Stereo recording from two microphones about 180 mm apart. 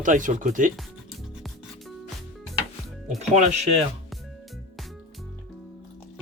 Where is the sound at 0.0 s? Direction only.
45° right (ahead or behind).